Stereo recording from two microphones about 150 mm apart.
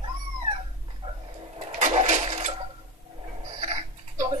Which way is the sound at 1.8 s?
55° right (ahead or behind).